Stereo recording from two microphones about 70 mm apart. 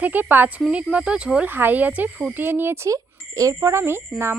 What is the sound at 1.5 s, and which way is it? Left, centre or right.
Speech, right.